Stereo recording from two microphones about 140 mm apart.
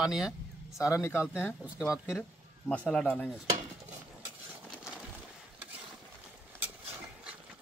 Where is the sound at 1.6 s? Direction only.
5° right (ahead or behind).